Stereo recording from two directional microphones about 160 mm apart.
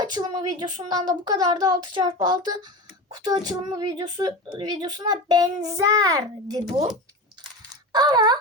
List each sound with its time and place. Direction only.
0.0 s speech: 25° right (ahead or behind)
7.9 s speech: 25° right (ahead or behind)